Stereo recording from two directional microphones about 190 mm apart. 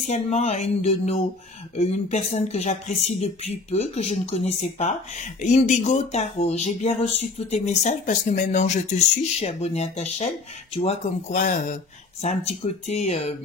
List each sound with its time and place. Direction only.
0.0 s speech: 35° left (ahead or behind)